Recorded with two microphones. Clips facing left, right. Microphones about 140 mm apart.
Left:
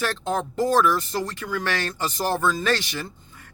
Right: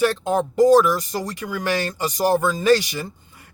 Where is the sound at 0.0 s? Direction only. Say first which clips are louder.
Right 6 dB; 15° right (ahead or behind).